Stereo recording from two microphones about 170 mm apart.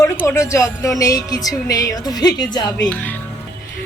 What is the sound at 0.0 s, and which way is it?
A woman's voice, 15° left (ahead or behind).